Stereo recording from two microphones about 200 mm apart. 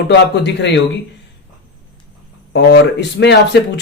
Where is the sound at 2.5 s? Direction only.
60° left (ahead or behind).